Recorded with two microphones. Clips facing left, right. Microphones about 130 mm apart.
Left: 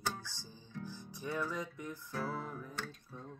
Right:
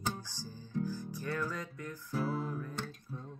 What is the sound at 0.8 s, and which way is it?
Music, 20° left (ahead or behind).